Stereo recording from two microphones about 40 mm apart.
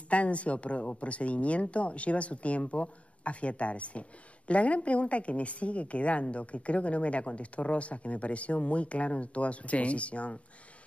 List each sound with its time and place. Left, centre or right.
0.1 s speech: left